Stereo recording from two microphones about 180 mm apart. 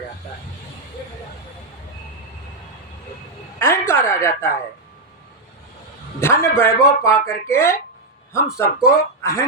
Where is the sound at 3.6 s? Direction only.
15° left (ahead or behind).